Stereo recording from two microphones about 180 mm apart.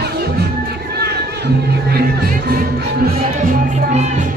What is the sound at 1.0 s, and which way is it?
Music, 65° right (ahead or behind).